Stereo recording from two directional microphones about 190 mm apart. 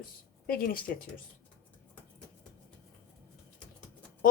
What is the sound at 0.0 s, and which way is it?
A woman's voice, 50° left (ahead or behind).